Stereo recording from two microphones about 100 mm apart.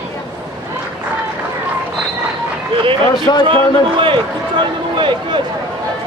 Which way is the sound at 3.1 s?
45° left (ahead or behind).